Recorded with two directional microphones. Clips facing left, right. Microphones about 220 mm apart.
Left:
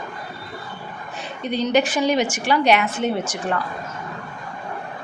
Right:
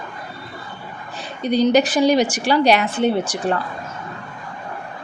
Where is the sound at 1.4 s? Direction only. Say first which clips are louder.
Right 4 dB; 35° right (ahead or behind).